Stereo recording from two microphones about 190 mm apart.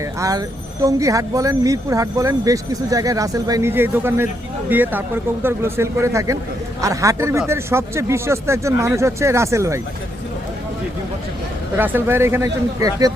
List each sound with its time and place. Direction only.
0.2 s speech: 20° right (ahead or behind)
11.8 s speech: 10° right (ahead or behind)